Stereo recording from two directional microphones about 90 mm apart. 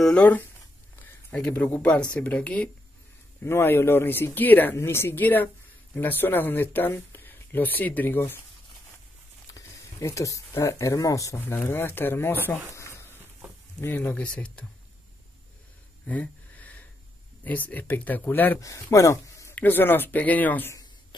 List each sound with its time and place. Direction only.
0.0 s speech: 15° left (ahead or behind)
3.4 s speech: 25° left (ahead or behind)
9.5 s speech: 35° left (ahead or behind)
11.3 s speech: 25° left (ahead or behind)
13.7 s speech: 20° left (ahead or behind)
16.1 s a sound: 15° left (ahead or behind)
17.4 s speech: 20° left (ahead or behind)
18.6 s speech: 35° left (ahead or behind)
19.5 s speech: 20° left (ahead or behind)